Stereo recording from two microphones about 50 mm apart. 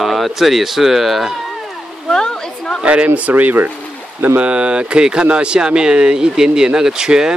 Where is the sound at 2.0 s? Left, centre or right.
Centre.